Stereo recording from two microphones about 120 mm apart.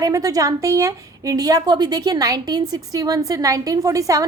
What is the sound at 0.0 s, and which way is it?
A woman's voice, 30° right (ahead or behind).